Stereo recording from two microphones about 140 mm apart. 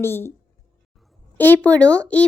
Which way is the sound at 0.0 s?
15° left (ahead or behind).